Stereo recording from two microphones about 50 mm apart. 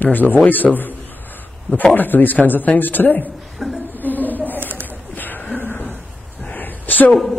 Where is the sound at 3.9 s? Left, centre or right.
Left.